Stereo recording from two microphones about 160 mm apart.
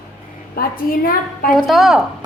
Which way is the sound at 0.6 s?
65° left (ahead or behind).